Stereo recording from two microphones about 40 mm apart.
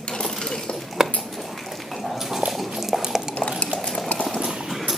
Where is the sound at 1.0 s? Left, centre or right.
Centre.